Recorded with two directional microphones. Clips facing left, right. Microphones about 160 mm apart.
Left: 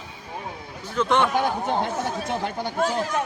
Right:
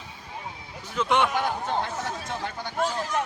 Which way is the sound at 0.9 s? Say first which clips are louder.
Left 2 dB; 5° right (ahead or behind).